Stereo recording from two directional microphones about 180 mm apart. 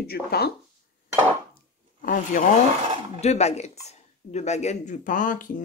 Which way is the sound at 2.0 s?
45° left (ahead or behind).